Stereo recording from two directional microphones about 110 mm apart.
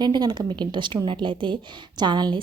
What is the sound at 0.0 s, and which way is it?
A woman's voice, 40° right (ahead or behind).